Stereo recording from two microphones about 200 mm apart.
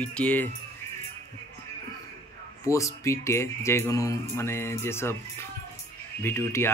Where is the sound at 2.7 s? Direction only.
15° left (ahead or behind).